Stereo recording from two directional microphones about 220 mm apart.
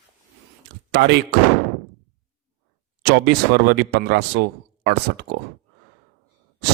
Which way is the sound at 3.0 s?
50° right (ahead or behind).